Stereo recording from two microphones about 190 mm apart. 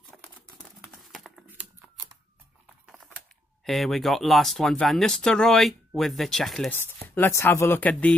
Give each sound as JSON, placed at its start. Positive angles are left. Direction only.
{"t": 0.2, "sound": "typing", "side_deg": 5}
{"t": 2.6, "sound": "a sound", "side_deg": -5}
{"t": 3.6, "sound": "speech", "side_deg": 0}
{"t": 6.8, "sound": "speech", "side_deg": 15}